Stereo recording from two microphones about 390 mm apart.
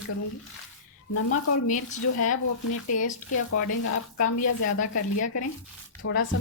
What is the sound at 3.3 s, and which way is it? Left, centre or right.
Speech, left.